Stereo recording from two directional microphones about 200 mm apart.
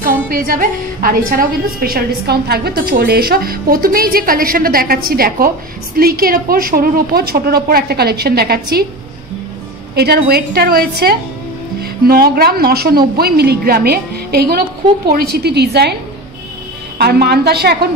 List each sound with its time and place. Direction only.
0.0 s a woman's voice: 45° right (ahead or behind)
9.9 s a woman's voice: 50° right (ahead or behind)
17.0 s a woman's voice: 55° right (ahead or behind)